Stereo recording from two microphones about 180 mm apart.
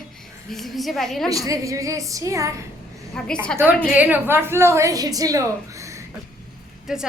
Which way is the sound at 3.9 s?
10° right (ahead or behind).